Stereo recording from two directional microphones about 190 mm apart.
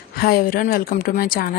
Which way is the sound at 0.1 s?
50° left (ahead or behind).